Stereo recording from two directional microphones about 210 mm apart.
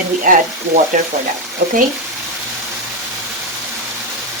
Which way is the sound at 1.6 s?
50° right (ahead or behind).